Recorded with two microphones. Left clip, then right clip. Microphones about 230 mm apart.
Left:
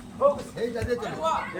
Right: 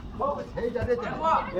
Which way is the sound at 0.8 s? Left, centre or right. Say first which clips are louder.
Right 3 dB; left.